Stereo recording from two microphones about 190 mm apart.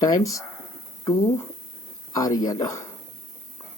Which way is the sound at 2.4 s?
20° left (ahead or behind).